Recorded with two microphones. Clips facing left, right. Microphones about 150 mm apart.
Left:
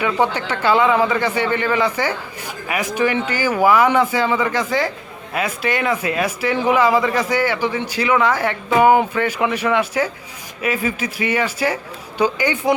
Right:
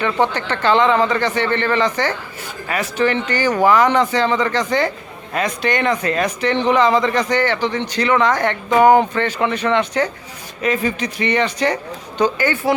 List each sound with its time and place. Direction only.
0.0 s speech: 10° left (ahead or behind)